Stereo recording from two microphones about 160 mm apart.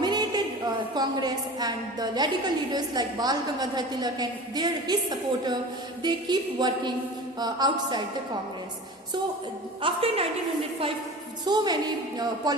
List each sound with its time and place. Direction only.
0.0 s a sound: 25° right (ahead or behind)
0.9 s a woman's voice: 25° right (ahead or behind)
9.8 s a woman's voice: 35° right (ahead or behind)
11.4 s a woman's voice: 25° right (ahead or behind)